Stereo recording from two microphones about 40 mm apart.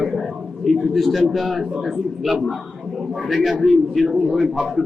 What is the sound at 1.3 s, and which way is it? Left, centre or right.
A man's voice, centre.